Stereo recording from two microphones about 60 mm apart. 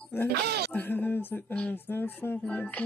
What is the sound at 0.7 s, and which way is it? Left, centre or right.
Speech, left.